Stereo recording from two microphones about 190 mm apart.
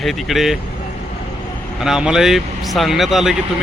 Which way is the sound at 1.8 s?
5° right (ahead or behind).